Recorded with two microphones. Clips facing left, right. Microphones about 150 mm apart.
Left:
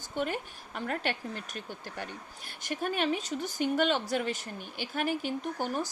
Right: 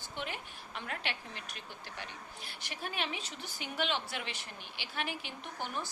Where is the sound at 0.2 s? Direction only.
45° left (ahead or behind).